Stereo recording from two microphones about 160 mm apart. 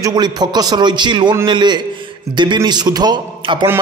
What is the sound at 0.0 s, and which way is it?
A man's voice, 25° right (ahead or behind).